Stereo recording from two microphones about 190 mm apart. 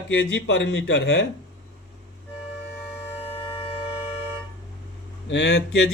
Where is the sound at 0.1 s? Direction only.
75° left (ahead or behind).